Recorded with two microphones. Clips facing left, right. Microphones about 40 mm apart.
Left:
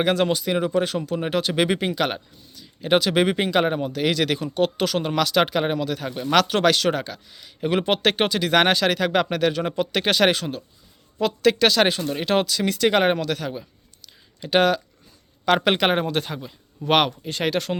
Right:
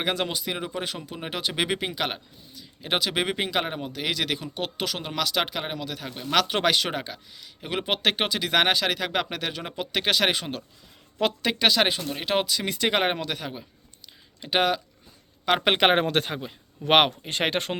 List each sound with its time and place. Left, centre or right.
0.0 s speech: centre
6.5 s speech: centre
7.3 s speech: centre
11.4 s speech: centre
15.8 s speech: right
16.0 s speech: right